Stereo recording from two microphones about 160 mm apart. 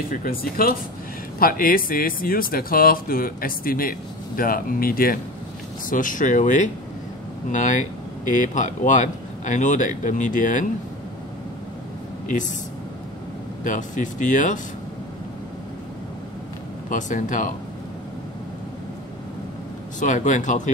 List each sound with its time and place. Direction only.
0.1 s speech: 65° left (ahead or behind)
13.7 s speech: 50° left (ahead or behind)
16.9 s speech: 55° left (ahead or behind)
20.0 s speech: 50° left (ahead or behind)